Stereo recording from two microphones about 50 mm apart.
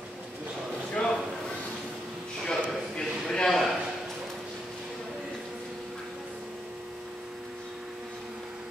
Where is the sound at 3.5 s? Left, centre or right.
Centre.